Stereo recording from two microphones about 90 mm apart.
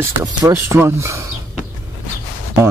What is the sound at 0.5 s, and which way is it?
Speech, 30° right (ahead or behind).